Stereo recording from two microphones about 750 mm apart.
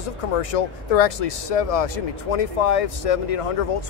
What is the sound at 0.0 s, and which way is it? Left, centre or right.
Speech, left.